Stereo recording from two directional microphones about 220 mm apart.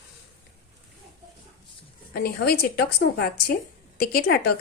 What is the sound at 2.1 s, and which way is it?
A woman's voice, 45° left (ahead or behind).